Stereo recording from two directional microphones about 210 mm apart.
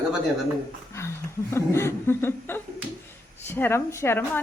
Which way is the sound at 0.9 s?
15° left (ahead or behind).